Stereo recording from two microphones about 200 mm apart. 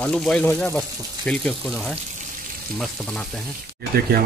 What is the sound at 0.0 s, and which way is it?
Speech, 5° left (ahead or behind).